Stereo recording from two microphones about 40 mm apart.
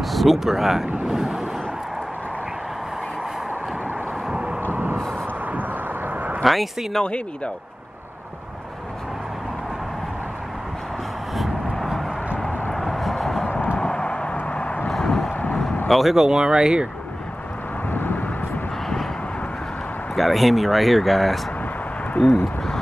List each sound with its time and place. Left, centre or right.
0.0 s speech: centre
1.0 s vehicle: centre
5.5 s vehicle: right
6.4 s speech: centre
11.3 s vehicle: centre
13.2 s a sound: centre
13.7 s vehicle: left
15.0 s vehicle: centre
15.9 s speech: centre
16.3 s speech: centre
17.9 s vehicle: left
20.2 s speech: centre